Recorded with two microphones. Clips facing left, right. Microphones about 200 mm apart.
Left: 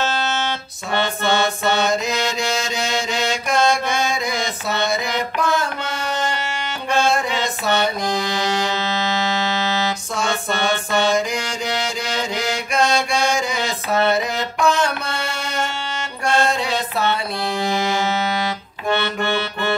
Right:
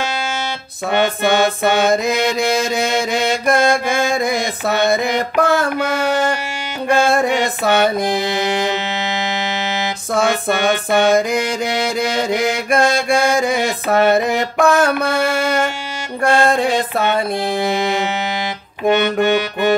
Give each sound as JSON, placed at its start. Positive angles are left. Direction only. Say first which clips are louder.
{"t": 1.6, "sound": "mantra", "louder": "right 5 dB", "side_deg": -55}
{"t": 8.6, "sound": "music", "louder": "right 2 dB", "side_deg": -15}
{"t": 10.9, "sound": "mantra", "louder": "right 6 dB", "side_deg": -55}
{"t": 17.5, "sound": "music", "louder": "right 3 dB", "side_deg": -20}
{"t": 18.9, "sound": "accordion", "louder": "right 7 dB", "side_deg": -15}